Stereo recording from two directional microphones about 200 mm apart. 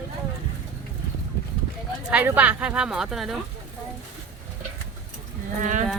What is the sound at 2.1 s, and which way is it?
Speech, 10° right (ahead or behind).